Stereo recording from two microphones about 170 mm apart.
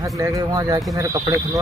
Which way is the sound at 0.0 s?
20° right (ahead or behind).